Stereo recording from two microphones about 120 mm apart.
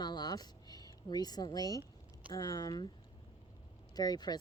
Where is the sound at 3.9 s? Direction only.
35° left (ahead or behind).